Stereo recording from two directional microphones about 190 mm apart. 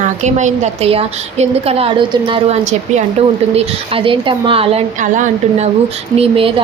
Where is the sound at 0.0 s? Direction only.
40° right (ahead or behind).